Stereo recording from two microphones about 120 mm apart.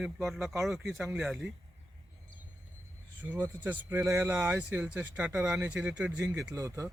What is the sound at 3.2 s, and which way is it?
Speech, 15° right (ahead or behind).